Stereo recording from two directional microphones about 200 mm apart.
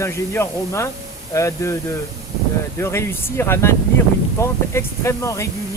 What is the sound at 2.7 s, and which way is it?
Speech, 15° left (ahead or behind).